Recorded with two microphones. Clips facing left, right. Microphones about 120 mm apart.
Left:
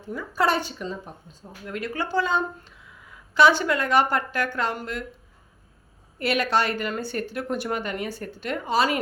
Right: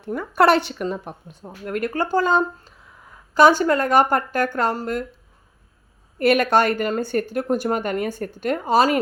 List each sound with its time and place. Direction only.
0.0 s speech: 60° right (ahead or behind); by 5.0 s 40° right (ahead or behind)
6.1 s a woman's voice: 50° right (ahead or behind)